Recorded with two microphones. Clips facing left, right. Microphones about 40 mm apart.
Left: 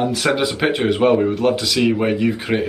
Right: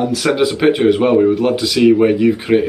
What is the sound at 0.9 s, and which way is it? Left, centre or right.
Speech, centre.